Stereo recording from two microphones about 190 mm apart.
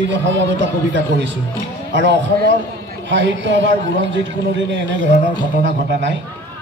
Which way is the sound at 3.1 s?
75° right (ahead or behind).